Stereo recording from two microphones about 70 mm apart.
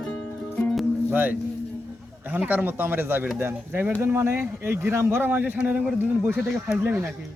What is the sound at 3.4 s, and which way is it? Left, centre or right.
A man's voice, right.